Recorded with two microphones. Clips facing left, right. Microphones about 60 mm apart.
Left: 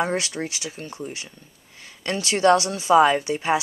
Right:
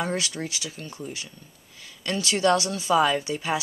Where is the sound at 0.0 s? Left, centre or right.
Left.